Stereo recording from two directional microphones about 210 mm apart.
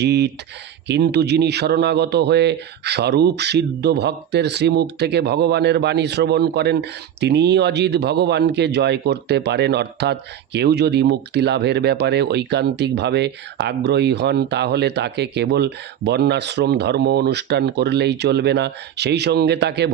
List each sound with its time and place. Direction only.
0.0 s speech: 50° right (ahead or behind)